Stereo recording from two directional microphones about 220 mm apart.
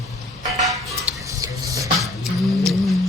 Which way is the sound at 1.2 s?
15° right (ahead or behind).